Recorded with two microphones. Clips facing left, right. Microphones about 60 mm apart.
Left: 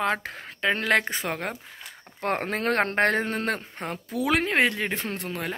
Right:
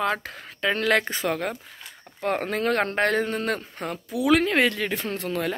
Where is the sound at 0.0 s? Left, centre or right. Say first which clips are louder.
Even; left.